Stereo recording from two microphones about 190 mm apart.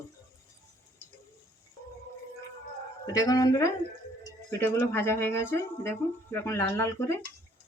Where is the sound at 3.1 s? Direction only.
20° left (ahead or behind).